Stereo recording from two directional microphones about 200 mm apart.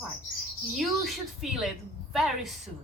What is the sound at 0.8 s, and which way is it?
A woman's voice, centre (ahead or behind).